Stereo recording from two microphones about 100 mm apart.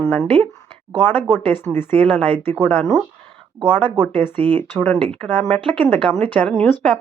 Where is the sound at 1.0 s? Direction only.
20° left (ahead or behind).